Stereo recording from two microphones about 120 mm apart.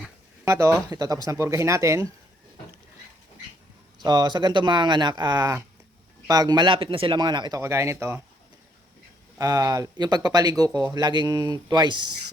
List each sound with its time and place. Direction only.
0.4 s speech: 25° right (ahead or behind)
3.9 s a man's voice: 35° right (ahead or behind)
7.6 s speech: 25° right (ahead or behind)
9.4 s speech: 30° right (ahead or behind)